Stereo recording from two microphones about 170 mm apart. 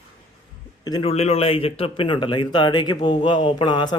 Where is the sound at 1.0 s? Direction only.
35° left (ahead or behind).